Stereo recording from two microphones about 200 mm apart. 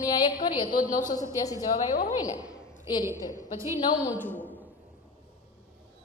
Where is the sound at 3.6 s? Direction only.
10° right (ahead or behind).